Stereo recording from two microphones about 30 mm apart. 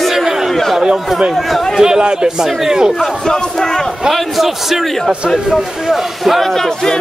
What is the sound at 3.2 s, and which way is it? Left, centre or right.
Speech, left.